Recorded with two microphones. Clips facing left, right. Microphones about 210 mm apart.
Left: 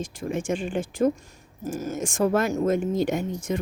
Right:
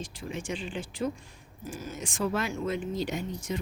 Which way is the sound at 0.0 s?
45° left (ahead or behind).